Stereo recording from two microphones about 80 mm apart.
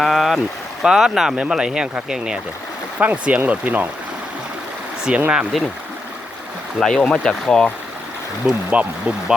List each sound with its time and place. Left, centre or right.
0.0 s speech: centre
5.1 s speech: centre
6.7 s speech: centre
8.7 s speech: centre